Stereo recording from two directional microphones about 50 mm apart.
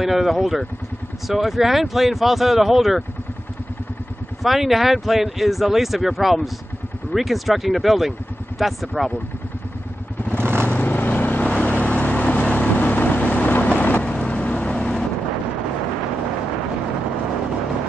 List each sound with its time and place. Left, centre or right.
0.0 s speech: centre
4.4 s speech: centre
10.3 s vehicle: right
10.7 s vehicle: left; by 15.0 s centre